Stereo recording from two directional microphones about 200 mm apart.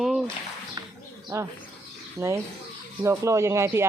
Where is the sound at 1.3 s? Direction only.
15° right (ahead or behind).